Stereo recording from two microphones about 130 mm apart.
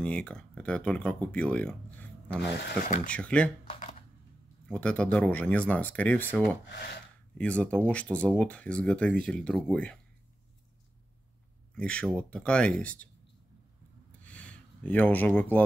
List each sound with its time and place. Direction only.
0.0 s speech: 10° left (ahead or behind)
2.8 s speech: 75° left (ahead or behind)
3.1 s speech: 10° left (ahead or behind)
4.6 s speech: 10° left (ahead or behind)
11.7 s speech: 10° left (ahead or behind)
14.2 s a sound: 10° left (ahead or behind)